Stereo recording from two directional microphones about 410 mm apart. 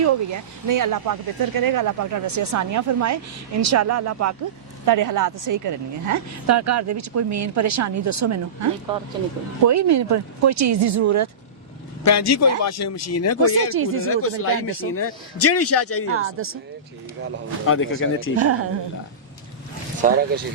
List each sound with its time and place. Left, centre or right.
0.0 s speech: right
12.0 s a man's voice: left
13.7 s speech: right
14.1 s a man's voice: left
16.1 s speech: right
17.7 s speech: left
18.3 s speech: right
20.0 s speech: centre